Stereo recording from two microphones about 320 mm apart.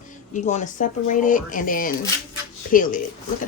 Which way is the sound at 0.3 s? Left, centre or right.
Left.